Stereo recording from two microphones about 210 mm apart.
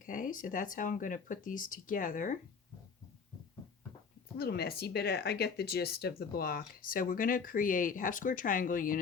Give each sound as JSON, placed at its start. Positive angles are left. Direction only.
{"t": 0.0, "sound": "speech", "side_deg": 40}
{"t": 4.4, "sound": "speech", "side_deg": 50}